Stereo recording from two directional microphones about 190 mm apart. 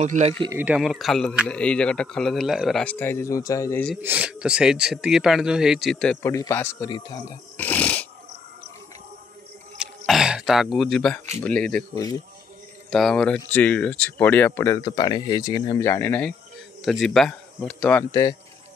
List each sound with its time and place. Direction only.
0.0 s speech: 40° right (ahead or behind)
0.5 s speech: 10° right (ahead or behind); by 3.8 s 15° left (ahead or behind)
4.0 s speech: 5° right (ahead or behind)
6.3 s speech: 15° left (ahead or behind)
7.5 s dog: 10° left (ahead or behind)
9.8 s throat clearing: 5° right (ahead or behind)
11.3 s speech: 5° left (ahead or behind)
11.9 s speech: 20° left (ahead or behind)
12.9 s speech: centre (ahead or behind)
14.9 s speech: 25° left (ahead or behind); by 18.0 s 5° left (ahead or behind)